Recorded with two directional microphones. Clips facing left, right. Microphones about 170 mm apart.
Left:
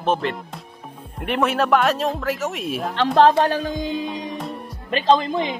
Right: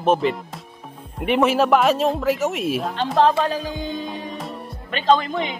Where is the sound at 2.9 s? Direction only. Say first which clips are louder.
Left 4 dB; 60° left (ahead or behind).